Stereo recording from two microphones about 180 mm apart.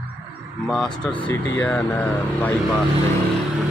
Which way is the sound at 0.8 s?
25° left (ahead or behind).